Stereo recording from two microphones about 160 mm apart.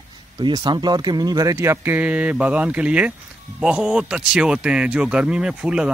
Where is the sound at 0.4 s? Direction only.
30° right (ahead or behind).